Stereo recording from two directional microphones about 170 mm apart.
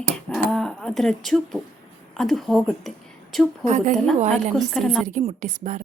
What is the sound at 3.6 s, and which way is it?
Speech, 45° right (ahead or behind).